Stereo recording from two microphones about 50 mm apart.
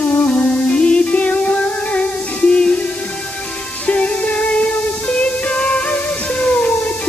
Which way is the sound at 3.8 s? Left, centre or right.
Left.